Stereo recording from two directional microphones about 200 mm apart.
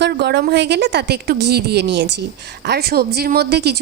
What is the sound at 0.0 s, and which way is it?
A woman's voice, 55° right (ahead or behind).